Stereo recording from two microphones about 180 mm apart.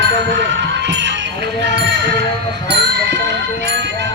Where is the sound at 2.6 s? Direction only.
70° right (ahead or behind).